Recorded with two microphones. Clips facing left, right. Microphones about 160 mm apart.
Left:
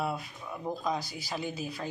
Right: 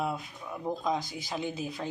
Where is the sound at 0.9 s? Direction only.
20° right (ahead or behind).